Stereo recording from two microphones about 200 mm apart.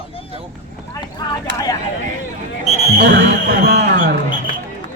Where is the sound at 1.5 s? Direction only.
60° right (ahead or behind).